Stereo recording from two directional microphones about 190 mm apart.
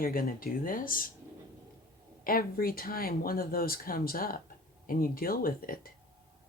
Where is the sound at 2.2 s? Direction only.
50° left (ahead or behind).